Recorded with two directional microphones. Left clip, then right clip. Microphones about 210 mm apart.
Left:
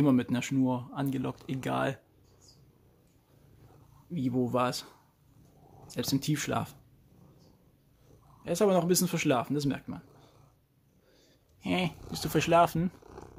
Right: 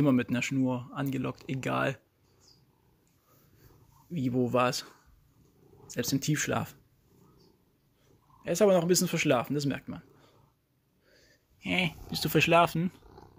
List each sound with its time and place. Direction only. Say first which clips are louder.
0.0 s speech: even; 5° right (ahead or behind)
4.1 s speech: right 2 dB; 10° right (ahead or behind)
8.4 s speech: right 2 dB; 10° right (ahead or behind)
11.2 s speech: even; 5° right (ahead or behind)
13.0 s purr: left 5 dB; 20° left (ahead or behind)